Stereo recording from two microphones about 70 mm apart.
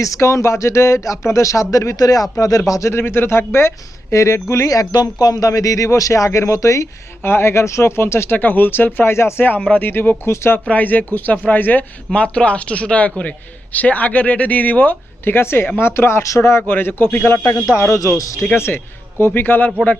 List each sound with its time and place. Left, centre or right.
0.0 s speech: left
2.9 s speech: left
7.2 s speech: left
10.7 s speech: left